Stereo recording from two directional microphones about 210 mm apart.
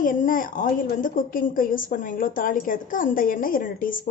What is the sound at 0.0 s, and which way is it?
A woman's voice, 40° left (ahead or behind).